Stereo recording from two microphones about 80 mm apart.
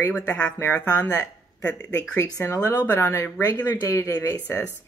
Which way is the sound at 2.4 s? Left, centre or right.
Left.